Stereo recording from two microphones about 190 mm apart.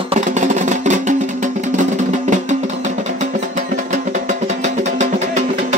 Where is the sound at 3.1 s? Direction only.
40° right (ahead or behind).